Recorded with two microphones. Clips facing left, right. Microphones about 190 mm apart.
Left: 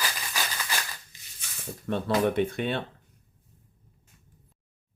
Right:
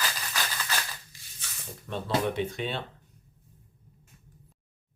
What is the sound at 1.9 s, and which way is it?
Speech, 55° left (ahead or behind).